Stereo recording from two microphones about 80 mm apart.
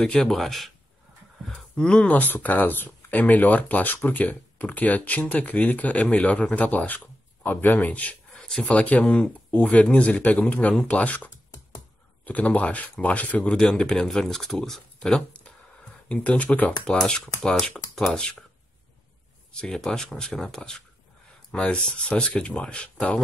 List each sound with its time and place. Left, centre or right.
0.0 s speech: centre
1.5 s speech: centre
8.3 s a sound: centre
8.7 s speech: centre
19.5 s speech: centre